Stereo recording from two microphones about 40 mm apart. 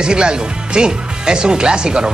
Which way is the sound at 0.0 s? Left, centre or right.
Right.